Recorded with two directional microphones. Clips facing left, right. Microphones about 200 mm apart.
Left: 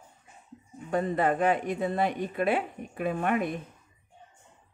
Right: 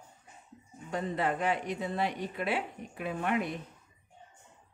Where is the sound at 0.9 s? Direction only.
50° left (ahead or behind).